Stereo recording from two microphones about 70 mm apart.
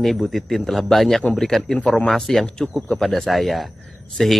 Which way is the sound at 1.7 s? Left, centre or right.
Centre.